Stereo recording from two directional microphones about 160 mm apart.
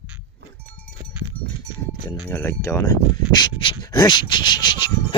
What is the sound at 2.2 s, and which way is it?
Speech, 15° left (ahead or behind).